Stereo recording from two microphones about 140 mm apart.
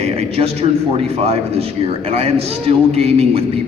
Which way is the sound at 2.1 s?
45° right (ahead or behind).